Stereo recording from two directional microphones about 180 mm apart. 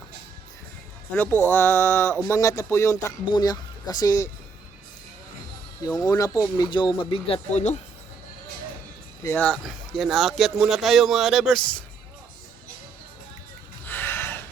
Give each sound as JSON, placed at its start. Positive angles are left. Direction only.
{"t": 1.1, "sound": "speech", "side_deg": 15}
{"t": 5.8, "sound": "speech", "side_deg": 20}
{"t": 9.2, "sound": "speech", "side_deg": 10}
{"t": 13.8, "sound": "a sound", "side_deg": 10}